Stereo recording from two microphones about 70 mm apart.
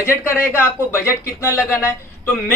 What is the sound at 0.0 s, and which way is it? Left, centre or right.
Speech, left.